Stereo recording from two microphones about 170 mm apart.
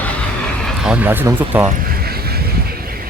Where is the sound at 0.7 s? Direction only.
5° right (ahead or behind).